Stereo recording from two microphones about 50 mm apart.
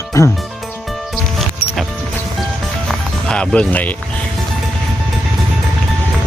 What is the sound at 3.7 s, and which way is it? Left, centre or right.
Speech, left.